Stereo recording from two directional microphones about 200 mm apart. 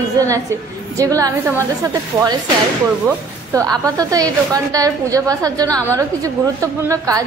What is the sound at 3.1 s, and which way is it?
A woman's voice, 15° right (ahead or behind).